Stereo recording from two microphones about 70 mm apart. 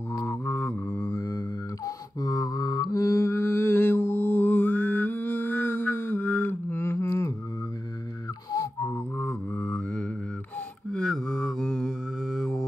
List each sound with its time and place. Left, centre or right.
0.2 s mantra: left
0.8 s mantra: left
2.1 s mantra: left
8.8 s music: left
10.9 s mantra: centre